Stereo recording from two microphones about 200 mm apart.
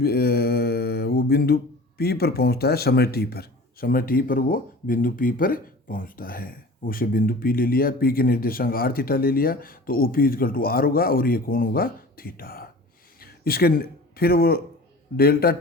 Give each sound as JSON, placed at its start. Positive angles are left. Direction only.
{"t": 0.0, "sound": "mantra", "side_deg": 50}
{"t": 2.0, "sound": "speech", "side_deg": 50}